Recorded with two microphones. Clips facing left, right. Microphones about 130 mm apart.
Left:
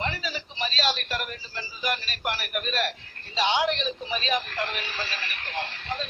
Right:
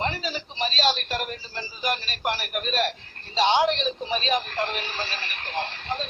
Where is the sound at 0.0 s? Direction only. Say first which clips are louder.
Right 3 dB; 30° right (ahead or behind).